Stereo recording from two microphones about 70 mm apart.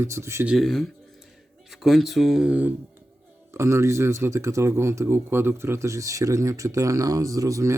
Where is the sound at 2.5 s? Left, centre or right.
Right.